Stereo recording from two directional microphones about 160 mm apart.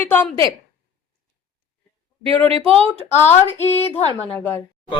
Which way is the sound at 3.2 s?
15° left (ahead or behind).